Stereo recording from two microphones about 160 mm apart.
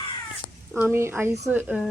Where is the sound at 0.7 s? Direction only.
15° right (ahead or behind).